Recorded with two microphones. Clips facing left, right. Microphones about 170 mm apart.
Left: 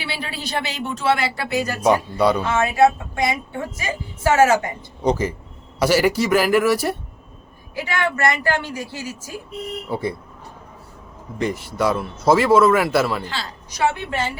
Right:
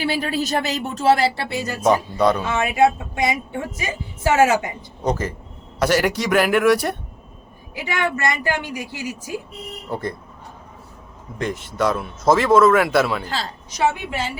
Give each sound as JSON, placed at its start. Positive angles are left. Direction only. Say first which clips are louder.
{"t": 0.0, "sound": "speech", "louder": "right 8 dB", "side_deg": -45}
{"t": 1.8, "sound": "speech", "louder": "right 1 dB", "side_deg": 5}
{"t": 2.4, "sound": "speech", "louder": "left 1 dB", "side_deg": -20}
{"t": 5.0, "sound": "speech", "louder": "left 3 dB", "side_deg": 10}
{"t": 7.8, "sound": "speech", "louder": "left 1 dB", "side_deg": -15}
{"t": 9.9, "sound": "speech", "louder": "left 1 dB", "side_deg": 10}
{"t": 11.3, "sound": "speech", "louder": "left 1 dB", "side_deg": 5}
{"t": 13.7, "sound": "a woman's voice", "louder": "even", "side_deg": -20}